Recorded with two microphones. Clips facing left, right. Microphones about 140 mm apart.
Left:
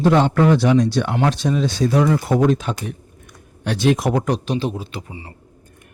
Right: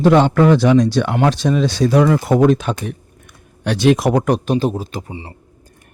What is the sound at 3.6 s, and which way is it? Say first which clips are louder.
Speech: right 4 dB; 85° right.